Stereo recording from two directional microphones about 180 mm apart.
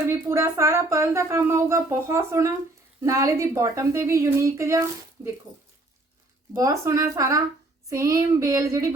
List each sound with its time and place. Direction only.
0.1 s speech: 15° right (ahead or behind)
6.5 s speech: 20° right (ahead or behind)